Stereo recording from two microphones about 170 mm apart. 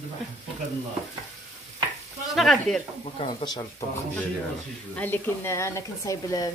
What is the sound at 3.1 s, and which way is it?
Speech, 25° left (ahead or behind).